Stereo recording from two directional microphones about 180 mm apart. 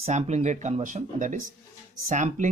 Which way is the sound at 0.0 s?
40° right (ahead or behind).